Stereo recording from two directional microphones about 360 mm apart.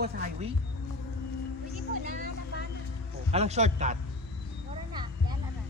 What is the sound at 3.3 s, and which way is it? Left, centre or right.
Speech, centre.